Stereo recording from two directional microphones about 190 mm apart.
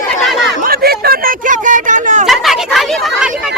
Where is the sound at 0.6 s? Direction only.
55° right (ahead or behind).